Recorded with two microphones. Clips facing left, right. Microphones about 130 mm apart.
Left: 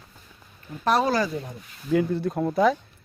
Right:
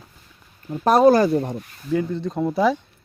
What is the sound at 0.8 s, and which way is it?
Speech, 45° right (ahead or behind).